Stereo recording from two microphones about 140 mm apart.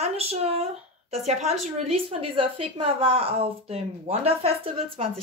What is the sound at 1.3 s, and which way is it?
A woman's voice, 55° right (ahead or behind).